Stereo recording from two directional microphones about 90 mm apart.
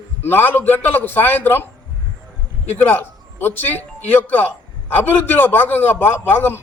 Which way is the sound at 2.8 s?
20° left (ahead or behind).